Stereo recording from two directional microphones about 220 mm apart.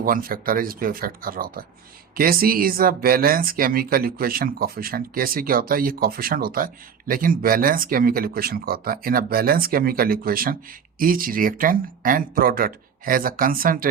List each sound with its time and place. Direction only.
0.0 s speech: 40° right (ahead or behind)